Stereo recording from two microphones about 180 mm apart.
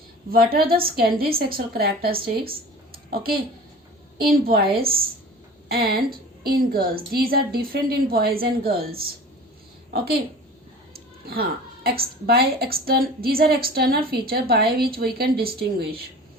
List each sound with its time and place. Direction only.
0.3 s a woman's voice: 55° right (ahead or behind)
4.2 s a woman's voice: 55° right (ahead or behind)
10.9 s a woman's voice: 60° right (ahead or behind)